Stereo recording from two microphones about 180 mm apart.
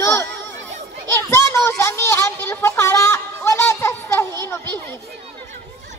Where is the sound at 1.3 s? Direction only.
15° left (ahead or behind).